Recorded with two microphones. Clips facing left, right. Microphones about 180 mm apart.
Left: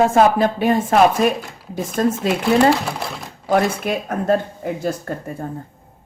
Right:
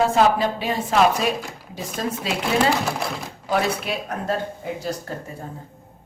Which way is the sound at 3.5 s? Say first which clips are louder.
Left 5 dB; 50° left (ahead or behind).